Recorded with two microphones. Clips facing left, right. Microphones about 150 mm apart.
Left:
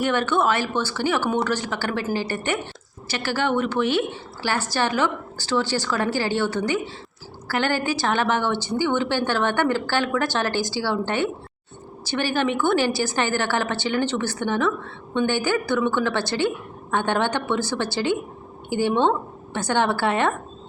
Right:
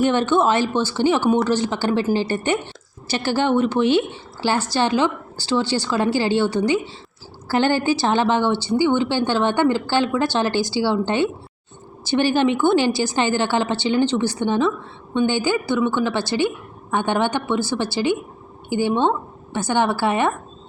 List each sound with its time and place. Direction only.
0.0 s a woman's voice: 25° right (ahead or behind); by 20.3 s 10° right (ahead or behind)